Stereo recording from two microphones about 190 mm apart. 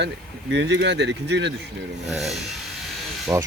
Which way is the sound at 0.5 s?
65° right (ahead or behind).